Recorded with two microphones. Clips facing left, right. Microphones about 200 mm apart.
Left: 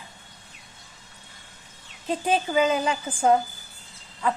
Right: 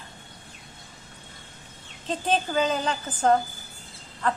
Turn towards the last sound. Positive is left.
turn(degrees=10)  # may be behind; listen again after turning